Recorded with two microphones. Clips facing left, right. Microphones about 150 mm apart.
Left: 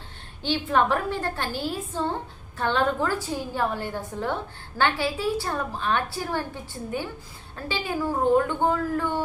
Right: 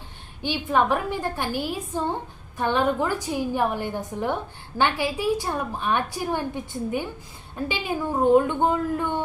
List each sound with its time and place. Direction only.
0.4 s a woman's voice: 10° right (ahead or behind)